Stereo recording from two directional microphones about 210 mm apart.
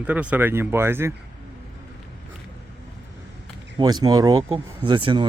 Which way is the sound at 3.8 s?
20° right (ahead or behind).